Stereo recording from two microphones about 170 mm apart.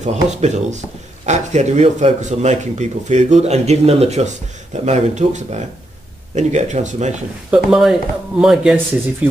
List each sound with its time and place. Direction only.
0.0 s speech: 45° right (ahead or behind)
7.5 s speech: centre (ahead or behind)